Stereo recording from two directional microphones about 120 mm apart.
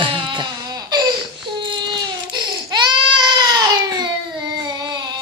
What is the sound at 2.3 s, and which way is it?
Baby cry, 40° right (ahead or behind).